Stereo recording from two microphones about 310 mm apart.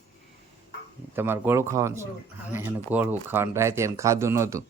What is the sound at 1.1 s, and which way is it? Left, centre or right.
Speech, centre.